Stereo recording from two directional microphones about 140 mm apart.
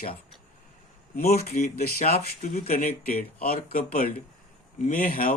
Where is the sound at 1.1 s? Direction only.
55° left (ahead or behind).